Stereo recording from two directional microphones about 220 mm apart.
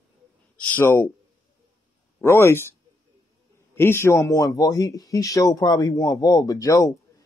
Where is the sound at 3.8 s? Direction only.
10° left (ahead or behind).